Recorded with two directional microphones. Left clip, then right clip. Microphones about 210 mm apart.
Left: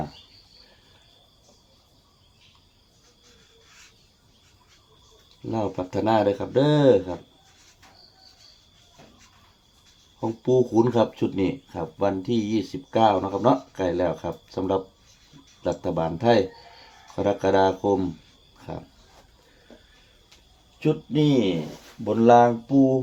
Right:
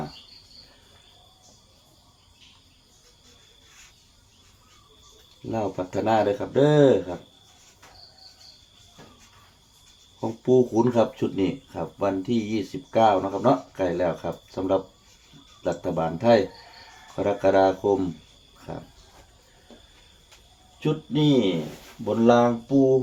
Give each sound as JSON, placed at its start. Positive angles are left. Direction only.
{"t": 5.5, "sound": "speech", "side_deg": 50}
{"t": 10.2, "sound": "speech", "side_deg": 50}
{"t": 20.7, "sound": "speech", "side_deg": 40}